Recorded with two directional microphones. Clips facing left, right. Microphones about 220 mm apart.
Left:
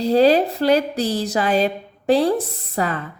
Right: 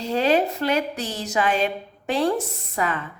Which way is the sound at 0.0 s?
35° left (ahead or behind).